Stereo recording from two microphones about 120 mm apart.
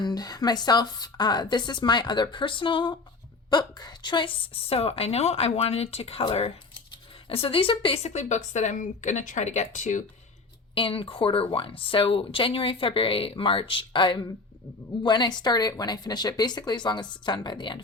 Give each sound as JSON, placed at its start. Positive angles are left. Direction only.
{"t": 0.0, "sound": "a woman's voice", "side_deg": 35}
{"t": 10.8, "sound": "speech", "side_deg": 50}